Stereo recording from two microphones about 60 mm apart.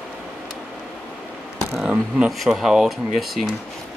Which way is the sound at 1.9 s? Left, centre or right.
Centre.